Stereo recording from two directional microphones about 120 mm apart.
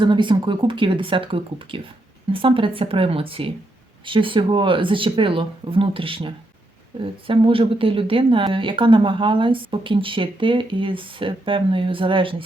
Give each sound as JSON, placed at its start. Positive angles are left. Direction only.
{"t": 0.0, "sound": "speech", "side_deg": -40}